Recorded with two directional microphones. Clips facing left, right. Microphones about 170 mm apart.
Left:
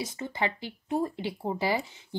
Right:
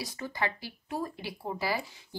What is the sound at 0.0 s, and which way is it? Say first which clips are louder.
A woman's voice: left 3 dB; 20° left (ahead or behind).